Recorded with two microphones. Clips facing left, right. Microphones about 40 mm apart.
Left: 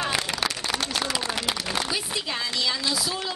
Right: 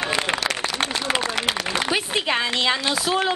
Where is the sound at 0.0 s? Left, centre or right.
Right.